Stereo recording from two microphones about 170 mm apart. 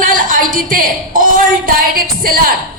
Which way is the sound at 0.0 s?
50° right (ahead or behind).